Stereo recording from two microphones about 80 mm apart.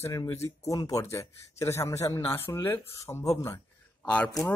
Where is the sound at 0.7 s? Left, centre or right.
Left.